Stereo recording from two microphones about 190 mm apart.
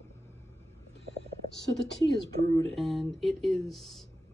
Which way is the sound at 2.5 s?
30° right (ahead or behind).